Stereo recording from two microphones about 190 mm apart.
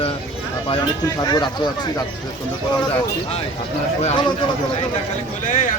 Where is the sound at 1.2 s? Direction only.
25° left (ahead or behind).